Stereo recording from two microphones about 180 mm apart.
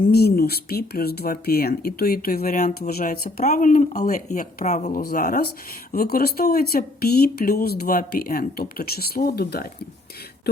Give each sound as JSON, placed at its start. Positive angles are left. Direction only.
{"t": 0.1, "sound": "speech", "side_deg": 60}
{"t": 3.4, "sound": "speech", "side_deg": 45}
{"t": 4.9, "sound": "speech", "side_deg": 55}